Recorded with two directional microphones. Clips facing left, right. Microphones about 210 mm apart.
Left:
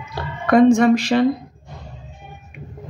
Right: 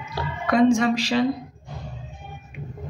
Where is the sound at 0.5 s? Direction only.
55° left (ahead or behind).